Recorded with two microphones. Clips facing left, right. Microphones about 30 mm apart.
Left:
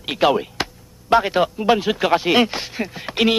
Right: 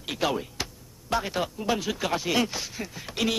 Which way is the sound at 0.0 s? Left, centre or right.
Left.